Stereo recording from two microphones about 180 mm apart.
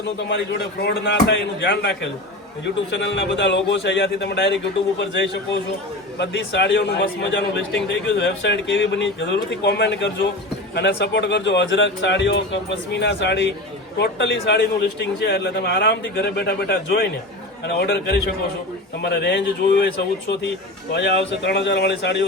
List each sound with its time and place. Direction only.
0.3 s a man's voice: 75° left (ahead or behind)